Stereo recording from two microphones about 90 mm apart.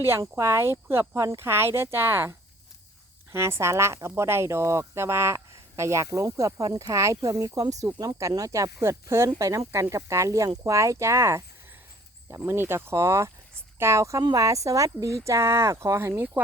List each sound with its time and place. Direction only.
0.2 s speech: 30° right (ahead or behind)
3.3 s speech: 30° right (ahead or behind)
14.2 s speech: 45° right (ahead or behind); by 16.4 s 30° right (ahead or behind)